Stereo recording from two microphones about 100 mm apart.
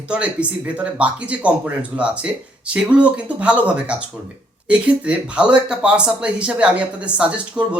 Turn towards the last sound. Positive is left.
turn(degrees=-10)  # may be behind; listen again after turning